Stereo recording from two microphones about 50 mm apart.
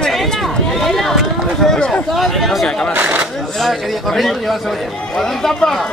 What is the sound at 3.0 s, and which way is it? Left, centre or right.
Speech, right.